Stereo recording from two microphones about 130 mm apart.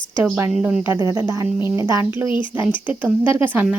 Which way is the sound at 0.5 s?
5° right (ahead or behind).